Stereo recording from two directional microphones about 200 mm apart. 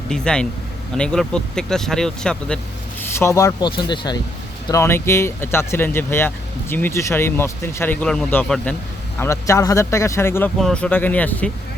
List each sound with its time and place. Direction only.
0.1 s speech: 5° left (ahead or behind)